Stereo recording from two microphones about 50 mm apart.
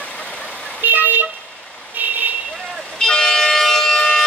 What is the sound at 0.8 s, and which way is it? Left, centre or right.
Vehicle, right.